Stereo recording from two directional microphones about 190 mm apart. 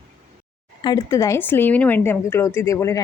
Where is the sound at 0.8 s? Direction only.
20° left (ahead or behind).